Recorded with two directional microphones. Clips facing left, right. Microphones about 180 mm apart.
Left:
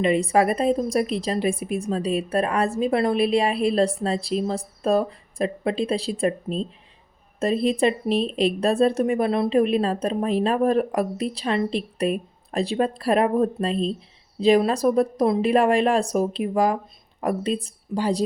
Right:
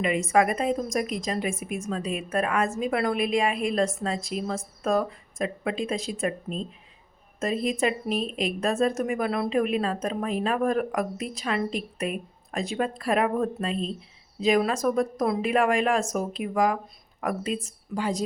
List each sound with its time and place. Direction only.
0.0 s a woman's voice: 35° left (ahead or behind)